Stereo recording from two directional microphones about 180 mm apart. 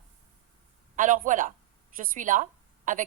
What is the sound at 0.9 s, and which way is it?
A woman's voice, 45° right (ahead or behind).